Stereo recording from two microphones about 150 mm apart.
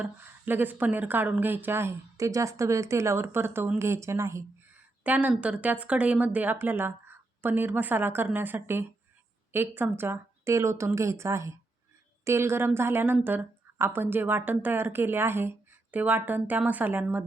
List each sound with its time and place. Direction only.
0.0 s a woman's voice: 15° right (ahead or behind)